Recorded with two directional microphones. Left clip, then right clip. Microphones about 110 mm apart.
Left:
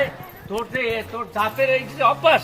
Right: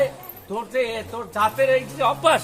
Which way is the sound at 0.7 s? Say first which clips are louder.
Right 1 dB; 60° right (ahead or behind).